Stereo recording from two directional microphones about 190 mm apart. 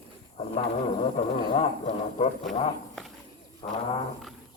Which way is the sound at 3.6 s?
25° left (ahead or behind).